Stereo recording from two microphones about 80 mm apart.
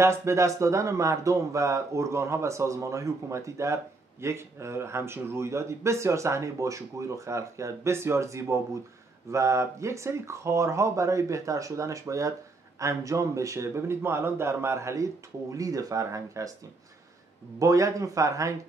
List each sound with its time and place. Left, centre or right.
0.0 s speech: right
17.6 s speech: right